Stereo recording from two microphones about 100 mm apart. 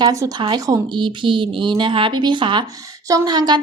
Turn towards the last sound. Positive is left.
turn(degrees=-45)  # may be behind; listen again after turning